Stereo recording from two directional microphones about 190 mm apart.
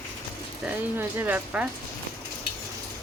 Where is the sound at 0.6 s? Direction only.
10° right (ahead or behind).